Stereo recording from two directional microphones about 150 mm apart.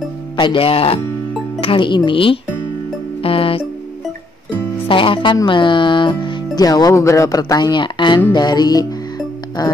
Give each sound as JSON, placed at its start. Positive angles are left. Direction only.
{"t": 0.4, "sound": "speech", "side_deg": 35}
{"t": 3.2, "sound": "music", "side_deg": 40}
{"t": 4.8, "sound": "speech", "side_deg": 35}
{"t": 8.3, "sound": "music", "side_deg": 30}